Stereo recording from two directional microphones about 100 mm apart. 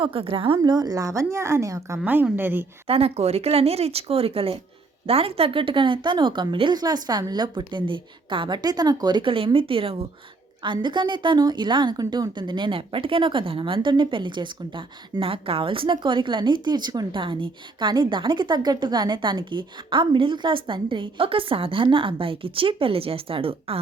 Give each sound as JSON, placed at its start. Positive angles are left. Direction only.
{"t": 0.0, "sound": "a woman's voice", "side_deg": -60}
{"t": 0.6, "sound": "a woman's voice", "side_deg": -40}
{"t": 2.2, "sound": "a woman's voice", "side_deg": -20}
{"t": 2.8, "sound": "speech", "side_deg": -80}
{"t": 9.3, "sound": "a woman's voice", "side_deg": -65}
{"t": 10.6, "sound": "a woman's voice", "side_deg": -50}
{"t": 17.2, "sound": "a woman's voice", "side_deg": -55}